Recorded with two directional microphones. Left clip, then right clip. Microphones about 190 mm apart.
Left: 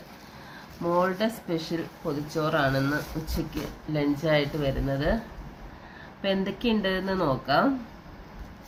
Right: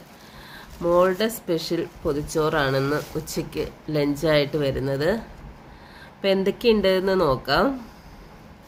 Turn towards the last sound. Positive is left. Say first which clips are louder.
# right 4 dB
turn(degrees=-65)  # may be behind; listen again after turning